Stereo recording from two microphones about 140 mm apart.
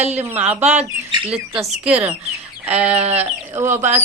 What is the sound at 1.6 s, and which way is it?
Speech, 5° right (ahead or behind).